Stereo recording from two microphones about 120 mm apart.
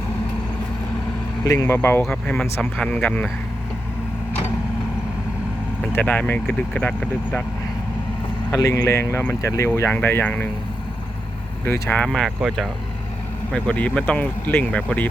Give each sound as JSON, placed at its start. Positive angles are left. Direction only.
{"t": 1.5, "sound": "speech", "side_deg": 25}
{"t": 2.4, "sound": "speech", "side_deg": 0}
{"t": 2.9, "sound": "speech", "side_deg": 10}
{"t": 5.9, "sound": "speech", "side_deg": 15}
{"t": 8.5, "sound": "speech", "side_deg": 25}
{"t": 11.6, "sound": "speech", "side_deg": 15}
{"t": 13.5, "sound": "speech", "side_deg": 10}